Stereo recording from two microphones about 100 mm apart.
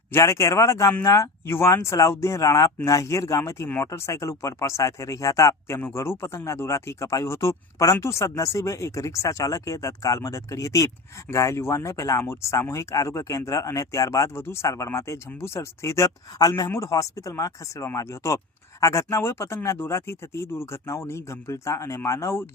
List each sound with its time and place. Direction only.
0.1 s speech: 30° left (ahead or behind)